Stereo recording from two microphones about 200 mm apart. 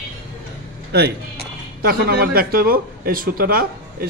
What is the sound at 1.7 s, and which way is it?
Speech, 50° right (ahead or behind).